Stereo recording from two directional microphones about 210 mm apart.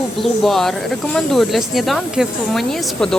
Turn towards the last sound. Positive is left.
turn(degrees=0)  # may be behind; listen again after turning